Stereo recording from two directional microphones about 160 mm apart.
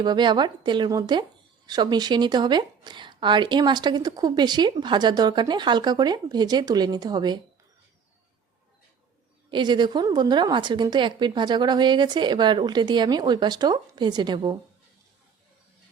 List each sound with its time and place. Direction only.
0.0 s a woman's voice: 30° right (ahead or behind)
9.5 s a woman's voice: 30° right (ahead or behind)